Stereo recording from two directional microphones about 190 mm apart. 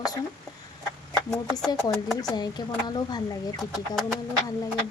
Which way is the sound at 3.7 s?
Centre (ahead or behind).